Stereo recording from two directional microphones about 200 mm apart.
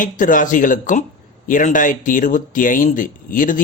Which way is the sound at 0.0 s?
40° left (ahead or behind).